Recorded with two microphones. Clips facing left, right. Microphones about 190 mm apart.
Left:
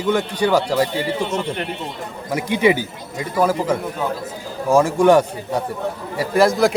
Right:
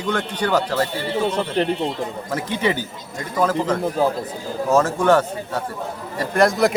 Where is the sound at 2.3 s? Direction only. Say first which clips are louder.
Left 6 dB; 10° left (ahead or behind).